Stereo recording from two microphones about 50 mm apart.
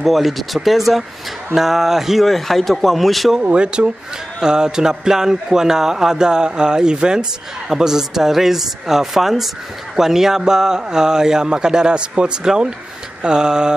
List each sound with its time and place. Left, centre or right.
0.0 s a man's voice: centre
3.5 s speech: right